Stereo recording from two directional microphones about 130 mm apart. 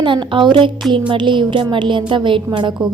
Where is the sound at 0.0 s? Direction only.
40° right (ahead or behind).